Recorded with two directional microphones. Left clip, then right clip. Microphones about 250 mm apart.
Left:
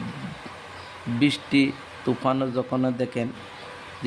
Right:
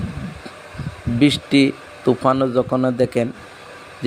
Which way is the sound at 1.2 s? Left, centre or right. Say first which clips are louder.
Right 6 dB; right.